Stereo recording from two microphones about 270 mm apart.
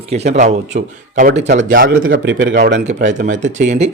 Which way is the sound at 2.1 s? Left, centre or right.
Right.